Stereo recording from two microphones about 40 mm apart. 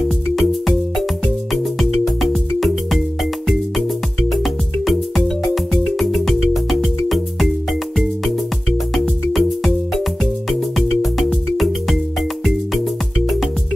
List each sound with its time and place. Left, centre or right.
0.4 s music: centre
4.3 s music: centre
9.3 s music: centre